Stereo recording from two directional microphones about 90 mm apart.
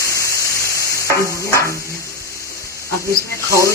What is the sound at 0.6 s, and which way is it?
Stir, 35° right (ahead or behind).